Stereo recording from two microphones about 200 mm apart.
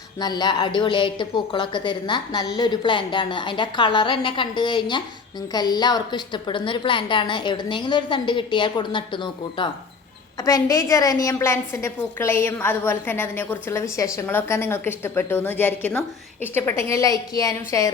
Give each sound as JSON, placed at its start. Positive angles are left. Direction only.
{"t": 0.2, "sound": "a woman's voice", "side_deg": 20}